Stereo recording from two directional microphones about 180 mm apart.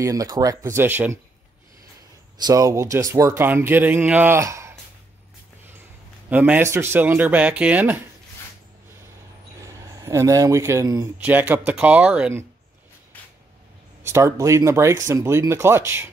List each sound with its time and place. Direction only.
0.0 s speech: 20° right (ahead or behind)
2.3 s speech: 20° right (ahead or behind)
6.3 s speech: 10° right (ahead or behind)
9.6 s speech: 15° right (ahead or behind)
14.0 s speech: 15° right (ahead or behind)